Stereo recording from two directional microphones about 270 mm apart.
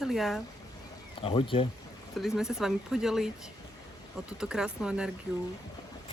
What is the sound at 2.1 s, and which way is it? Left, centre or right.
Speech, centre.